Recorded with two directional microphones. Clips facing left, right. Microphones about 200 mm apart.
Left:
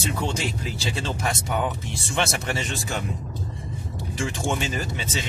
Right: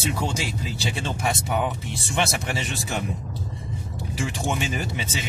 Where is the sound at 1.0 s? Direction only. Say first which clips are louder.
Right 2 dB; 15° right (ahead or behind).